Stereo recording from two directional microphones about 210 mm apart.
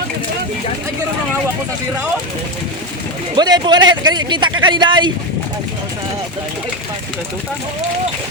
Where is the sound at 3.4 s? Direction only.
20° right (ahead or behind).